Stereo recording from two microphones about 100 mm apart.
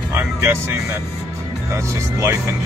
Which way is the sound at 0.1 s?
20° right (ahead or behind).